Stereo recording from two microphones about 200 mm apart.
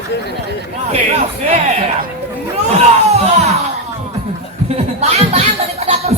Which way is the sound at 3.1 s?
30° right (ahead or behind).